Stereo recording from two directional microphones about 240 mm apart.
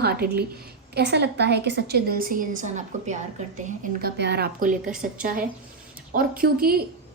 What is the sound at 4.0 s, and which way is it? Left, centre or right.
Speech, right.